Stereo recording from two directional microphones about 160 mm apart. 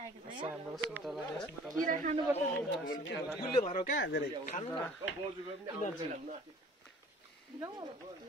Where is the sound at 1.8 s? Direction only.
55° right (ahead or behind).